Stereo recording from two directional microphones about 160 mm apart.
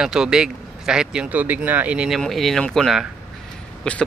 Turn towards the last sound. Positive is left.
turn(degrees=5)  # may be behind; listen again after turning